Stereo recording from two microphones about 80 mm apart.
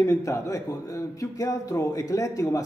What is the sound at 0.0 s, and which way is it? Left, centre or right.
Speech, left.